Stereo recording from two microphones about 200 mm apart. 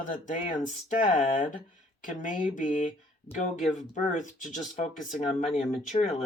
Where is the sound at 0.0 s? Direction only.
40° left (ahead or behind).